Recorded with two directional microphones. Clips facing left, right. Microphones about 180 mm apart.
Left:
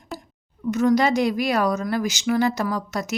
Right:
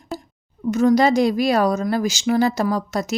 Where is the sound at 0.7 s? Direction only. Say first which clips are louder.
Right 3 dB; 30° right (ahead or behind).